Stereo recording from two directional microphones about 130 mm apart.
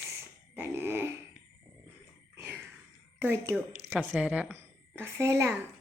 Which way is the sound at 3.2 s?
20° right (ahead or behind).